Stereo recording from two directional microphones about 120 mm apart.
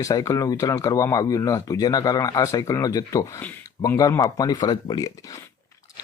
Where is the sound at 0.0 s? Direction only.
25° left (ahead or behind).